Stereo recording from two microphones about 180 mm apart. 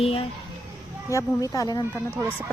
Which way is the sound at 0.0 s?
35° left (ahead or behind).